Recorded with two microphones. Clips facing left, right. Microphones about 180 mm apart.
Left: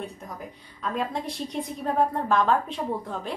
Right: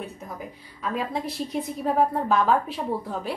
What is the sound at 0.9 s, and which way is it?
A woman's voice, 5° right (ahead or behind).